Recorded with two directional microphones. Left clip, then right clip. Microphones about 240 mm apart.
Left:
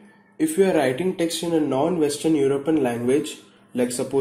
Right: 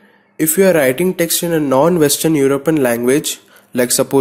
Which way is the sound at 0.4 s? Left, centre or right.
Right.